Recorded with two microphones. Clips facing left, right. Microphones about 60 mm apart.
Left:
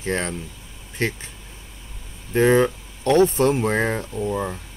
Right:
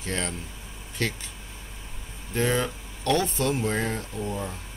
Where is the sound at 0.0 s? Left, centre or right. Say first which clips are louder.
Left 6 dB; left.